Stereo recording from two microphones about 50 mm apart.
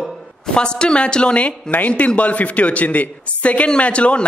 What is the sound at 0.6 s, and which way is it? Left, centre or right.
A man's voice, centre.